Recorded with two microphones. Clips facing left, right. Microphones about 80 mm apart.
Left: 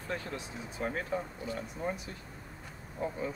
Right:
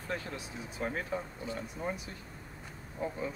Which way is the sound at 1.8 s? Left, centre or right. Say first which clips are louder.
Left 1 dB; centre.